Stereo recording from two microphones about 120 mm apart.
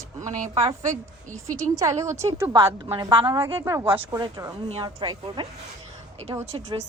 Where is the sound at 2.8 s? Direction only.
45° right (ahead or behind).